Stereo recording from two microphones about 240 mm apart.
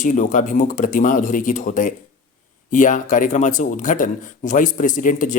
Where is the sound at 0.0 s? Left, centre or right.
Left.